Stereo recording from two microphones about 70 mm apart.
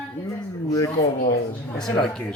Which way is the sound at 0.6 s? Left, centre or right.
Left.